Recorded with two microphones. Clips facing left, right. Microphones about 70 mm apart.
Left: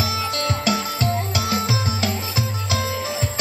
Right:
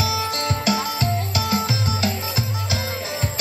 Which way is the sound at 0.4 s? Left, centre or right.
Right.